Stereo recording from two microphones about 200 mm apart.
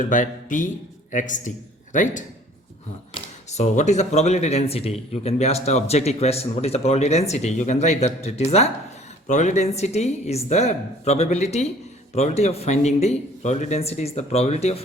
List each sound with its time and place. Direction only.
0.0 s a man's voice: 40° left (ahead or behind)
3.5 s speech: 35° left (ahead or behind)